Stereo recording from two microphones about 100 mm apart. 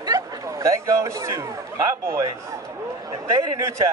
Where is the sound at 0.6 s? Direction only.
30° right (ahead or behind).